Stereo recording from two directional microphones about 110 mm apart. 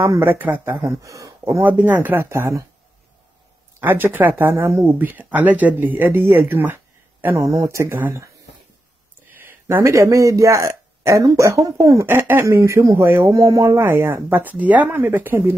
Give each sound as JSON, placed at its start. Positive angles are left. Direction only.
{"t": 0.0, "sound": "speech", "side_deg": -20}
{"t": 1.0, "sound": "speech", "side_deg": -30}
{"t": 1.6, "sound": "speech", "side_deg": -15}
{"t": 3.8, "sound": "speech", "side_deg": -20}
{"t": 7.3, "sound": "speech", "side_deg": -30}
{"t": 9.4, "sound": "speech", "side_deg": -20}